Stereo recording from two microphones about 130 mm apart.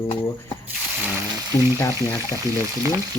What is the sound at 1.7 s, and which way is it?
Speech, 20° left (ahead or behind).